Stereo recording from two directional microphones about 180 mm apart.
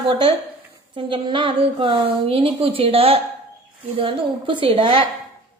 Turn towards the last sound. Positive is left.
turn(degrees=-30)  # may be behind; listen again after turning